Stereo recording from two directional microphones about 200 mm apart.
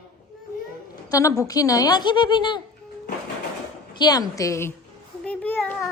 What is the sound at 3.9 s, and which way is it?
A child's voice, 20° left (ahead or behind).